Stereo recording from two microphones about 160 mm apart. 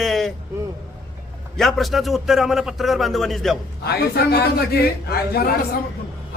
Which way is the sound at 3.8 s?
80° left.